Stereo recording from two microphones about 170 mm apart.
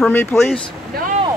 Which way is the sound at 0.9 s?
65° right (ahead or behind).